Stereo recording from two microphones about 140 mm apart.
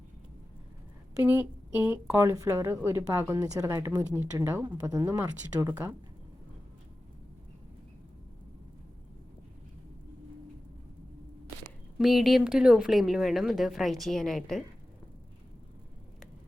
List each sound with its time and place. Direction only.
1.2 s a woman's voice: 10° right (ahead or behind)
11.9 s a woman's voice: centre (ahead or behind)